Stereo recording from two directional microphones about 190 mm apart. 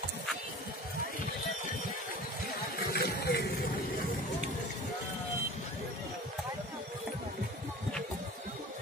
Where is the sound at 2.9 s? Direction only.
55° left (ahead or behind).